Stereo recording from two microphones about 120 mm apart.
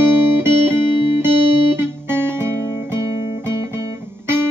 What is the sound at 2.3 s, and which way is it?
Guitar, 20° right (ahead or behind).